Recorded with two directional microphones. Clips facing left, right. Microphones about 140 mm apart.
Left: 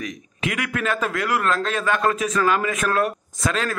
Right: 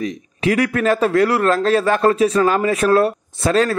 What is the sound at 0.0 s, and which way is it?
A man's voice, 35° right (ahead or behind).